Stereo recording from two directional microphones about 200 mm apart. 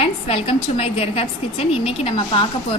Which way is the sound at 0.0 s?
30° left (ahead or behind).